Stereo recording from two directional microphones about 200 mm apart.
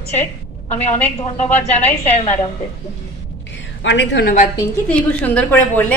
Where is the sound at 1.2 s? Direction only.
35° left (ahead or behind).